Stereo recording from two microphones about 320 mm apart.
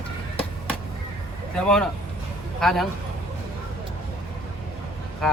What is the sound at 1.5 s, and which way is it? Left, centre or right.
Speech, centre.